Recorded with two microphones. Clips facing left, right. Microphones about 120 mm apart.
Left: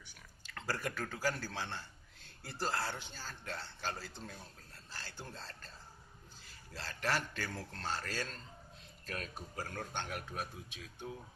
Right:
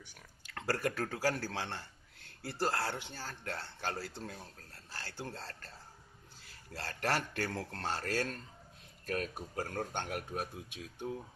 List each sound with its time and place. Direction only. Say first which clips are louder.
0.4 s a sound: right 5 dB; 60° right (ahead or behind)
1.1 s speech: right 3 dB; 65° right (ahead or behind)
6.7 s speech: right 2 dB; 60° right (ahead or behind)
9.0 s speech: right 7 dB; 45° right (ahead or behind)